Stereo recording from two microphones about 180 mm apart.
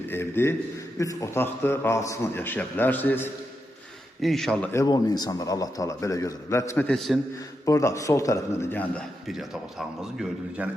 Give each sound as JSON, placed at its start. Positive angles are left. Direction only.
{"t": 0.1, "sound": "a man's voice", "side_deg": 15}
{"t": 4.8, "sound": "a man's voice", "side_deg": 20}
{"t": 7.6, "sound": "a man's voice", "side_deg": 15}